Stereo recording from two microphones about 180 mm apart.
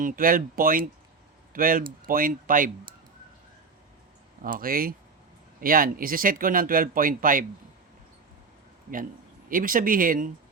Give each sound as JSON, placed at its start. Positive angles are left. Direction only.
{"t": 0.0, "sound": "speech", "side_deg": -50}
{"t": 4.4, "sound": "speech", "side_deg": -50}
{"t": 9.5, "sound": "speech", "side_deg": -50}